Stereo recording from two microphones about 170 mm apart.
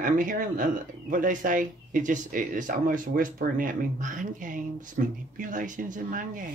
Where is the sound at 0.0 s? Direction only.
50° right (ahead or behind).